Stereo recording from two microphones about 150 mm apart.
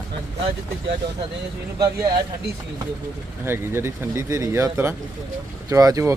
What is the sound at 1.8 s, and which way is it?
Speech, 25° right (ahead or behind).